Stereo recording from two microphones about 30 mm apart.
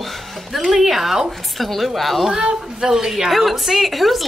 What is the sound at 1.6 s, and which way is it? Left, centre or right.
Speech, centre.